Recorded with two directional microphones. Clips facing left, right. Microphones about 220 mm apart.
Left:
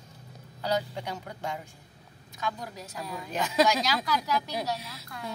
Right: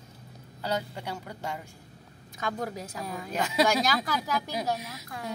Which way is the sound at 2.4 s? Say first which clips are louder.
Right 3 dB; 50° right (ahead or behind).